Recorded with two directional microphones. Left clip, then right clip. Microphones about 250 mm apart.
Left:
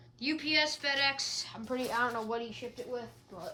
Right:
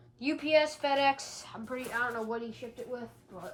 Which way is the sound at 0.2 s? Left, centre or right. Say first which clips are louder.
Right 3 dB; centre.